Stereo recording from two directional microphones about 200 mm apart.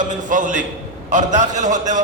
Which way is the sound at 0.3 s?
40° right (ahead or behind).